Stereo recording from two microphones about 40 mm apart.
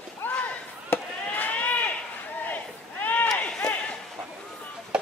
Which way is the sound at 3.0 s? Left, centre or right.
Left.